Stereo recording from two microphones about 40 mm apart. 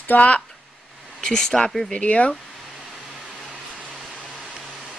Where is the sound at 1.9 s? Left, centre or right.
Left.